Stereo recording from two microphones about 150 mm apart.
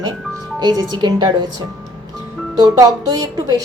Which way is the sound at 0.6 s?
30° right (ahead or behind).